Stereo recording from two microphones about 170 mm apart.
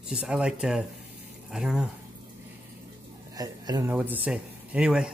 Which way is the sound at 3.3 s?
20° right (ahead or behind).